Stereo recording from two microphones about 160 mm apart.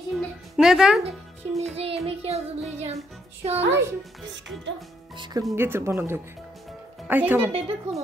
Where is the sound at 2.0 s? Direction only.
40° right (ahead or behind).